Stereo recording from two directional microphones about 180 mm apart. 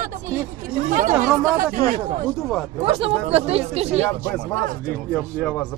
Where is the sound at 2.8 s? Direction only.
30° right (ahead or behind).